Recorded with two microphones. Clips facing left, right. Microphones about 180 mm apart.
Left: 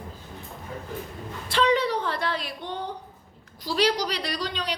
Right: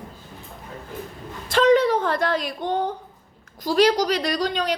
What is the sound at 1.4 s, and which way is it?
A woman's voice, 45° right (ahead or behind).